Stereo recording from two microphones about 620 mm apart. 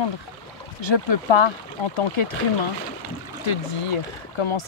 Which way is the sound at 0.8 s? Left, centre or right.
Left.